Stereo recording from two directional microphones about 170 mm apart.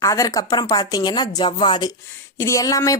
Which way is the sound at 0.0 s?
20° left (ahead or behind).